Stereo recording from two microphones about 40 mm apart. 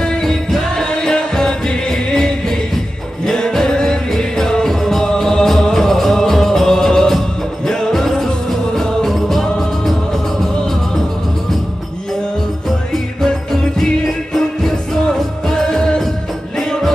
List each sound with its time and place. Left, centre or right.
0.0 s music: centre
9.8 s music: centre
13.2 s music: centre